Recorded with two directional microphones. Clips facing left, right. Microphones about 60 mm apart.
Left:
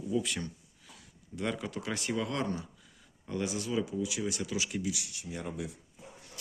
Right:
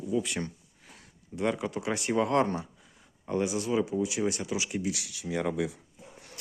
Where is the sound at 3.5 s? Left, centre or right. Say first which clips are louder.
Right 5 dB; right.